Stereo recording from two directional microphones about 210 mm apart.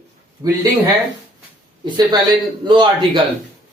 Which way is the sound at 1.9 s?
20° right (ahead or behind).